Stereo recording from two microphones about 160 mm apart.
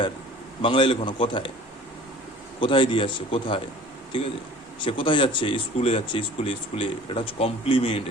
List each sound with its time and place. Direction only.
0.6 s speech: 35° left (ahead or behind)
2.6 s speech: 30° left (ahead or behind)
4.8 s speech: 30° left (ahead or behind)